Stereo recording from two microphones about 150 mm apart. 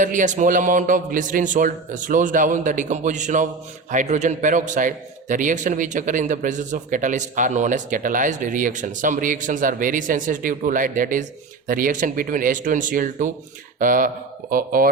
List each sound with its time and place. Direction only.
0.0 s a man's voice: 60° right (ahead or behind)